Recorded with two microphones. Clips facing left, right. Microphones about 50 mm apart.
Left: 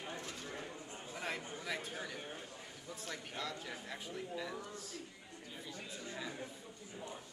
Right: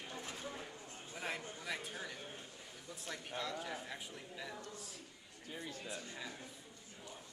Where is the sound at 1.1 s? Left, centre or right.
Centre.